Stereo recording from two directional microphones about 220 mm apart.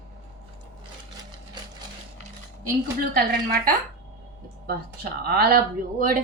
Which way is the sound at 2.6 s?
45° right (ahead or behind).